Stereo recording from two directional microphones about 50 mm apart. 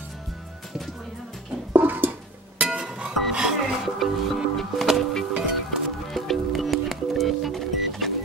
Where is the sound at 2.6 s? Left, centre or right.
Right.